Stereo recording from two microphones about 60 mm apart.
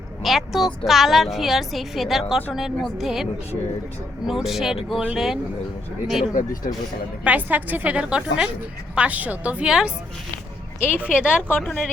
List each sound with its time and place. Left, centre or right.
0.2 s a woman's voice: centre
4.3 s a woman's voice: centre
7.3 s a woman's voice: right
7.9 s a woman's voice: centre
9.6 s a woman's voice: centre
10.8 s speech: left
11.2 s a woman's voice: centre